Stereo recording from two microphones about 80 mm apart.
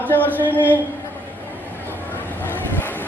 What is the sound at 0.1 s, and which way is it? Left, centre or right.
Speech, left.